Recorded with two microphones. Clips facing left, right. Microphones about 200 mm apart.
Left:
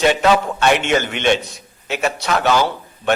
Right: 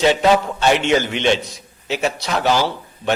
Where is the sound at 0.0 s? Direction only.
60° left (ahead or behind).